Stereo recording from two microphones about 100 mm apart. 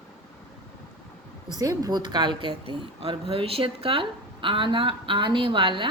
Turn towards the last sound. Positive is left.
turn(degrees=-60)  # may be behind; listen again after turning